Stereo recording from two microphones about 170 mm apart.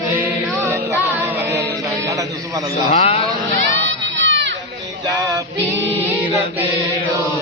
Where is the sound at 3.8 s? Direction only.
90° right.